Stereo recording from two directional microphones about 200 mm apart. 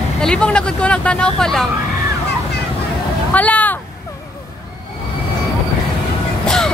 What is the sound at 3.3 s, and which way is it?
Vehicle, 10° left (ahead or behind).